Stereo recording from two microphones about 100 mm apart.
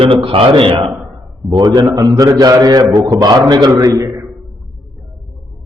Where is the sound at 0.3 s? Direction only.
60° right (ahead or behind).